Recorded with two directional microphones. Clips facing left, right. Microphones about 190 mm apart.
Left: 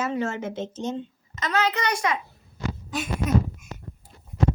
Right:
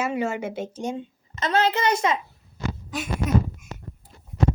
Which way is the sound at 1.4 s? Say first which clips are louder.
Right 3 dB; 30° right (ahead or behind).